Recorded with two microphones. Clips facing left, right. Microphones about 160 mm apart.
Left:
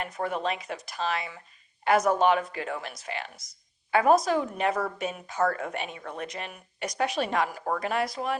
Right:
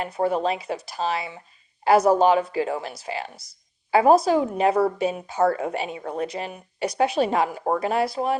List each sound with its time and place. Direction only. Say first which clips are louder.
0.0 s a woman's voice: right 7 dB; 30° right (ahead or behind)